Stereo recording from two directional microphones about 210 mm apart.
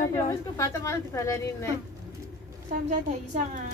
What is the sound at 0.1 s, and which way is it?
A woman's voice, 15° left (ahead or behind).